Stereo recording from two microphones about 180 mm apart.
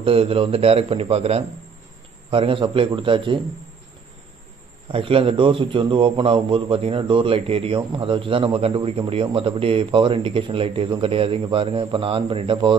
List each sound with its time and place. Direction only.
0.0 s a man's voice: 30° right (ahead or behind)
4.9 s a man's voice: 30° right (ahead or behind)